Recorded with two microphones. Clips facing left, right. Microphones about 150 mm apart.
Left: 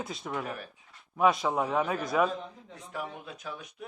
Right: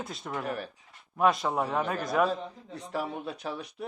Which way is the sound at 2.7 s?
35° right (ahead or behind).